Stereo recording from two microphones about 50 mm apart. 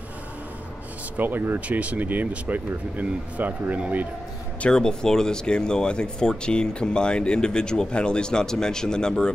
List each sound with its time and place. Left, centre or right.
1.1 s speech: right
1.7 s speech: right
4.6 s speech: centre